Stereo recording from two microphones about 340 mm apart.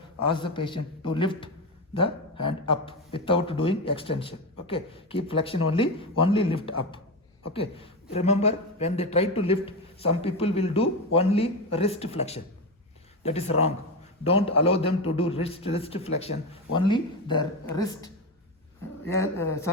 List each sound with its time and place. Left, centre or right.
0.3 s a man's voice: centre